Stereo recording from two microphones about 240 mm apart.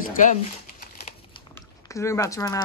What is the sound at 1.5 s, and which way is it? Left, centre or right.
Speech, centre.